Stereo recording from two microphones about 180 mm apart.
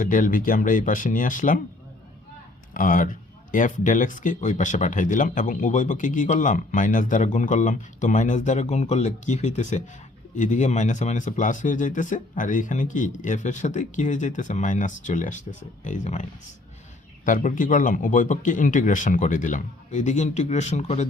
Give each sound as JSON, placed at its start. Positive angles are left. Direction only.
{"t": 0.0, "sound": "a man's voice", "side_deg": 50}
{"t": 2.7, "sound": "a man's voice", "side_deg": 50}
{"t": 17.2, "sound": "a man's voice", "side_deg": 45}